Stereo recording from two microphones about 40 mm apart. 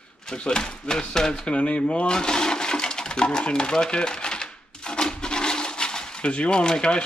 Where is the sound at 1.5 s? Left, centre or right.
Left.